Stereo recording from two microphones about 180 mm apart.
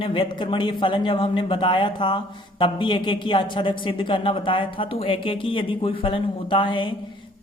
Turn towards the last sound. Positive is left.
turn(degrees=25)  # may be behind; listen again after turning